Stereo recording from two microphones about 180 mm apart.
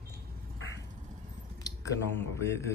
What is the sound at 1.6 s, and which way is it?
Speech, 15° left (ahead or behind).